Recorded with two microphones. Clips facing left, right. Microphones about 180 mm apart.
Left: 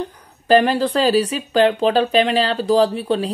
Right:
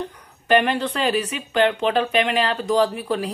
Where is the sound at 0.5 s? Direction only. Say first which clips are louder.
Left 4 dB; 35° left (ahead or behind).